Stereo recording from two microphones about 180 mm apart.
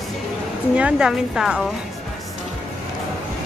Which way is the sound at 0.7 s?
5° right (ahead or behind).